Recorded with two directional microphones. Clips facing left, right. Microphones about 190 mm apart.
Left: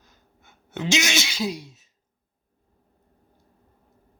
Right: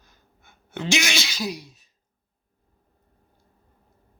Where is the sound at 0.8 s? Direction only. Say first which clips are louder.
Left 1 dB; 20° left (ahead or behind).